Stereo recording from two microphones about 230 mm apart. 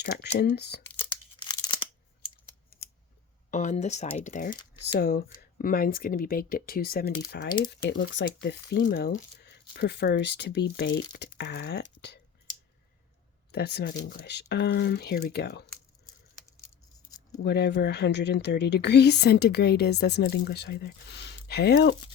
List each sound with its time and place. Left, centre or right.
0.3 s speech: left
1.1 s tearing: centre
3.5 s speech: left
13.5 s speech: left
16.6 s scissors: centre
17.4 s speech: left